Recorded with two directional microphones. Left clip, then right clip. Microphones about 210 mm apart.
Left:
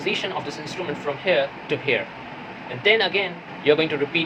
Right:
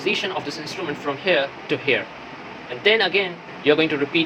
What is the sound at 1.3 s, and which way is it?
Speech, 25° right (ahead or behind).